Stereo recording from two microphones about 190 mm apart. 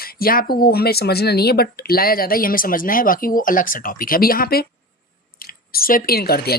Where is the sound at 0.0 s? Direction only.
50° left (ahead or behind).